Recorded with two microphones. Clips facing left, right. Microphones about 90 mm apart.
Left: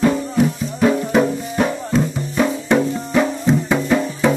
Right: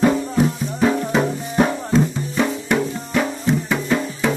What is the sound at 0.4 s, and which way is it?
Music, 5° right (ahead or behind).